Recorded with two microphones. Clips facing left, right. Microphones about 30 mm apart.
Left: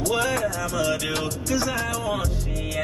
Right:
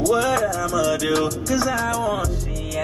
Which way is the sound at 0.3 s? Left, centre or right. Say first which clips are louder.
Right 4 dB; right.